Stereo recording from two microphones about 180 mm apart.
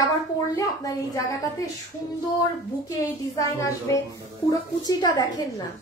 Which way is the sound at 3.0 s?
20° left (ahead or behind).